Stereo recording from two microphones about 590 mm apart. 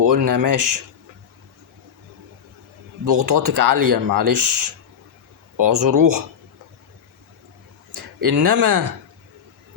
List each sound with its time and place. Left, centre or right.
0.0 s speech: right
3.0 s speech: right
5.5 s speech: right
7.9 s speech: right